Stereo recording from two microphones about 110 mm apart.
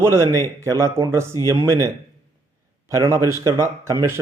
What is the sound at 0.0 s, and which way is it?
Speech, 25° right (ahead or behind).